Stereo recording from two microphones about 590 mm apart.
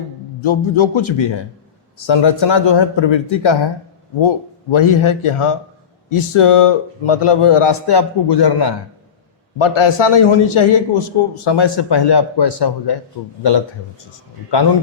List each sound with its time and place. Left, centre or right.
0.4 s a man's voice: left
4.7 s a man's voice: left
9.6 s a man's voice: left